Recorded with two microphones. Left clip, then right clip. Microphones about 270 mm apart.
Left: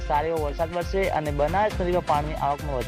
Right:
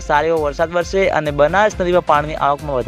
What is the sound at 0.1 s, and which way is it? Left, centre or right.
Speech, right.